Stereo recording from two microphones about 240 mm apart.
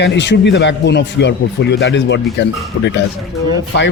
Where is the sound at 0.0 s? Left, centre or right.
Left.